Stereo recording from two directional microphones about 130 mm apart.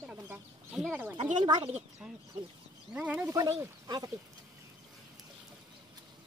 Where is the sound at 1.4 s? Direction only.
35° right (ahead or behind).